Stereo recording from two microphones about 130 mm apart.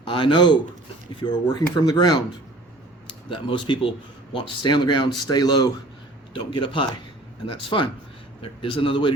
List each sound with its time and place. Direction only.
0.1 s a man's voice: 40° left (ahead or behind)
3.2 s a man's voice: 40° left (ahead or behind)